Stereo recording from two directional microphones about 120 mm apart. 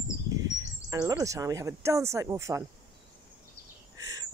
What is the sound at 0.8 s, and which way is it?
Speech, 30° right (ahead or behind).